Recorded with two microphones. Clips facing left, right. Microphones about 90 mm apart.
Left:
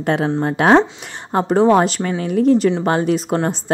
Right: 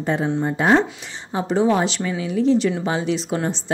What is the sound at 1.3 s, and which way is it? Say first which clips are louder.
A woman's voice: left 5 dB; 55° left (ahead or behind).